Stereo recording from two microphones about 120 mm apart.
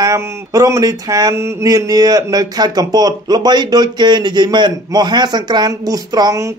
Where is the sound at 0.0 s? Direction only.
30° right (ahead or behind).